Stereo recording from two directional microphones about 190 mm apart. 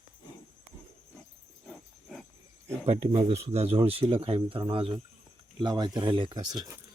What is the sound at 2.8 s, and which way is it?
Speech, 30° right (ahead or behind).